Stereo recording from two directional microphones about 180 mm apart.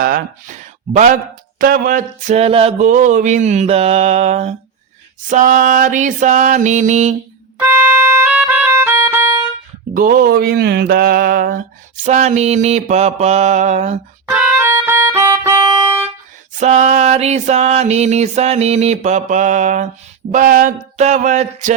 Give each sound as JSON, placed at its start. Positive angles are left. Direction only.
{"t": 0.0, "sound": "speech", "side_deg": -55}
{"t": 5.3, "sound": "mantra", "side_deg": -50}
{"t": 8.2, "sound": "music", "side_deg": -5}
{"t": 9.9, "sound": "mantra", "side_deg": -50}
{"t": 12.0, "sound": "speech", "side_deg": -40}
{"t": 14.3, "sound": "music", "side_deg": -5}
{"t": 16.6, "sound": "speech", "side_deg": -40}
{"t": 20.3, "sound": "mantra", "side_deg": -45}